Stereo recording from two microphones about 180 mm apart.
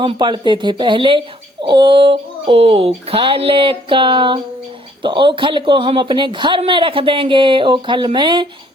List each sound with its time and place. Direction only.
0.0 s speech: 25° right (ahead or behind)